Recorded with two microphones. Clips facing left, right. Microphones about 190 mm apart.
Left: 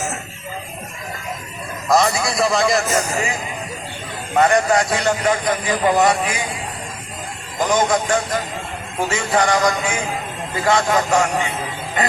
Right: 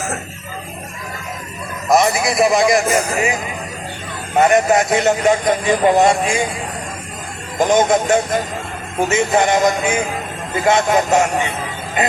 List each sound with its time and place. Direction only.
1.9 s a man's voice: 20° right (ahead or behind)
4.4 s a man's voice: 20° right (ahead or behind)
7.6 s a man's voice: 25° right (ahead or behind)